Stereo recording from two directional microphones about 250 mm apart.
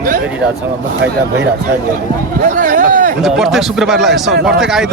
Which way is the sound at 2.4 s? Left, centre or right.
Right.